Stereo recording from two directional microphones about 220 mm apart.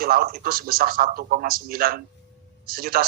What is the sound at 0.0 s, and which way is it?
A man's voice, 40° right (ahead or behind).